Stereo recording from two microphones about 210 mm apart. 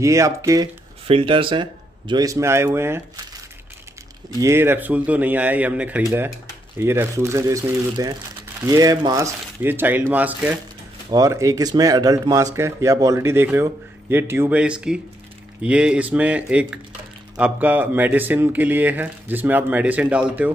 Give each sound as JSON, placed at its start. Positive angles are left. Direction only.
{"t": 0.0, "sound": "speech", "side_deg": -15}
{"t": 1.0, "sound": "speech", "side_deg": -25}
{"t": 4.4, "sound": "speech", "side_deg": -10}